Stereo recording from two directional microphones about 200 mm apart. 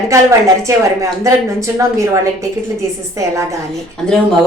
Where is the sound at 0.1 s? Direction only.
15° right (ahead or behind).